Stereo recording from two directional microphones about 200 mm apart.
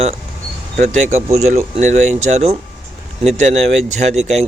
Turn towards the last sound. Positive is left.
turn(degrees=-35)  # may be behind; listen again after turning